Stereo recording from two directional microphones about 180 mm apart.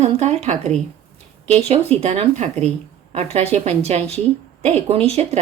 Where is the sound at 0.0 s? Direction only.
40° right (ahead or behind).